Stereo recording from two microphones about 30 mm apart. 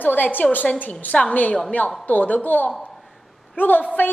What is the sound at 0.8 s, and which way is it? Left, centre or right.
A woman's voice, left.